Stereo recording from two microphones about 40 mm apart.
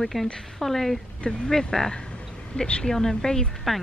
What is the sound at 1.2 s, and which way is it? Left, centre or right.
Speech, centre.